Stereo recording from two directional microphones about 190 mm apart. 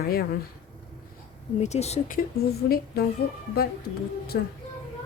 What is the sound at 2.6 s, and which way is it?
Speech, 50° left (ahead or behind).